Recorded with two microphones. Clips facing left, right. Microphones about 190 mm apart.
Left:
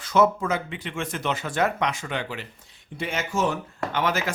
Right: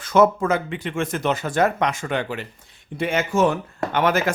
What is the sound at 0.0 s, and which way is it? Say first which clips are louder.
Speech: right 4 dB; 50° right (ahead or behind).